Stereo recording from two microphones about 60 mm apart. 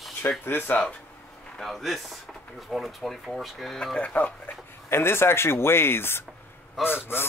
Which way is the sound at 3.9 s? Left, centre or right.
Left.